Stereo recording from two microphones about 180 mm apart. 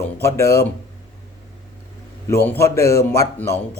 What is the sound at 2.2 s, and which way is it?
Speech, 15° left (ahead or behind).